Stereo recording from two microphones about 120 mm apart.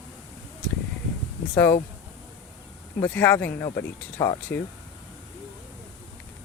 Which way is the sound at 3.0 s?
15° left (ahead or behind).